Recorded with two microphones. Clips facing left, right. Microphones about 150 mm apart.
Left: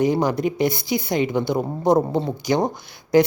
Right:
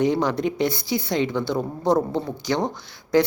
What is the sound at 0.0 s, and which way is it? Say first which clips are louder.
Speech: left 2 dB; 5° left (ahead or behind).